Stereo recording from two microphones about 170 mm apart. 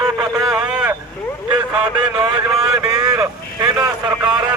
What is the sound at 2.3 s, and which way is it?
Vehicle, 20° right (ahead or behind).